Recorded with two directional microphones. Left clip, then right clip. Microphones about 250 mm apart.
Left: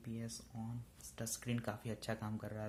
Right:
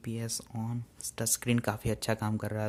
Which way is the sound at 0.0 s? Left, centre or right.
Right.